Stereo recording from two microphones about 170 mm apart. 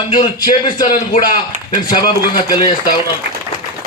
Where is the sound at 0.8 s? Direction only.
50° left (ahead or behind).